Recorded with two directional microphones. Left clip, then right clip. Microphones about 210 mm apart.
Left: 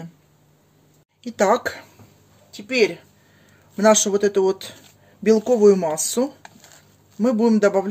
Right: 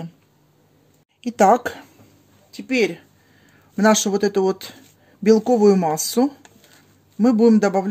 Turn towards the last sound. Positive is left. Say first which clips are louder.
# right 1 dB
turn(degrees=-30)  # may be behind; listen again after turning